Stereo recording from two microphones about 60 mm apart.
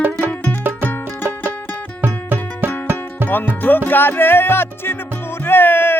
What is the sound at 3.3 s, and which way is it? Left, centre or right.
Music, left.